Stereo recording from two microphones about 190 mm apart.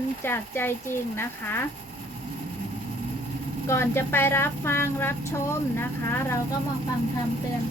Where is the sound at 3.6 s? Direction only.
15° left (ahead or behind).